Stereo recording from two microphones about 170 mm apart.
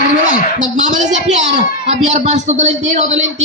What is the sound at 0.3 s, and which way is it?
A woman's voice, 45° right (ahead or behind).